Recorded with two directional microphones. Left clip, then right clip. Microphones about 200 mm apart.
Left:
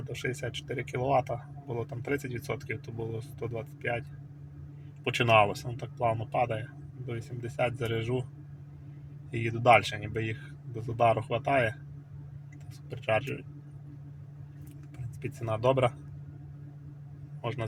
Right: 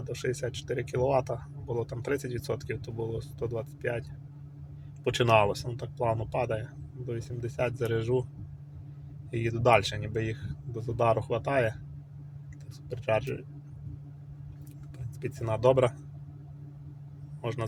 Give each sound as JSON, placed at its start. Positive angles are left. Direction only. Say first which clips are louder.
{"t": 0.1, "sound": "speech", "louder": "right 2 dB", "side_deg": -15}
{"t": 5.0, "sound": "speech", "louder": "even", "side_deg": -15}
{"t": 9.3, "sound": "speech", "louder": "left 1 dB", "side_deg": -15}
{"t": 12.9, "sound": "speech", "louder": "right 1 dB", "side_deg": -15}
{"t": 15.2, "sound": "speech", "louder": "right 3 dB", "side_deg": -15}
{"t": 17.4, "sound": "a man's voice", "louder": "right 1 dB", "side_deg": -15}